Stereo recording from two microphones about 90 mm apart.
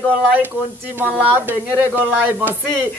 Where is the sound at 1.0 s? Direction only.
20° right (ahead or behind).